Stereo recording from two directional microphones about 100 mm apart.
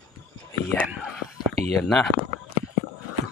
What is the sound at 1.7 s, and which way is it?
Speech, centre (ahead or behind).